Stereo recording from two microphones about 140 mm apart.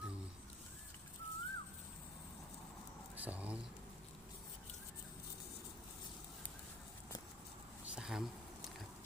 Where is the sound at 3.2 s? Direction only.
10° right (ahead or behind).